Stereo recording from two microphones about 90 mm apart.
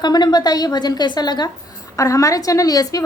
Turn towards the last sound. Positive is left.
turn(degrees=45)  # may be behind; listen again after turning